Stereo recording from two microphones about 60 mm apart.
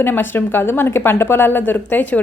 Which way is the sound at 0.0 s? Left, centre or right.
Left.